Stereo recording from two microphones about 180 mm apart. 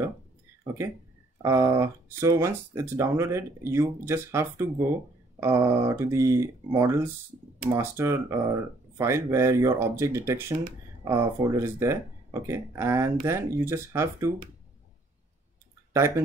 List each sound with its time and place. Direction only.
1.4 s speech: 15° right (ahead or behind)